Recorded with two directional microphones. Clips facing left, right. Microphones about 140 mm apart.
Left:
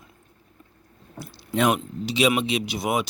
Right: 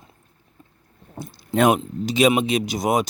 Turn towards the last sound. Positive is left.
turn(degrees=-40)  # may be behind; listen again after turning